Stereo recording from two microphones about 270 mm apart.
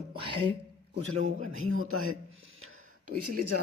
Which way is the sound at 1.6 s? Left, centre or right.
Right.